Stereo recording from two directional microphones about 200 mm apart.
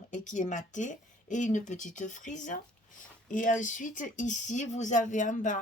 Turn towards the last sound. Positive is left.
turn(degrees=40)  # may be behind; listen again after turning